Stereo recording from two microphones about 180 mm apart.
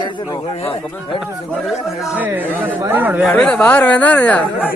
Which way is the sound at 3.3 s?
5° left (ahead or behind).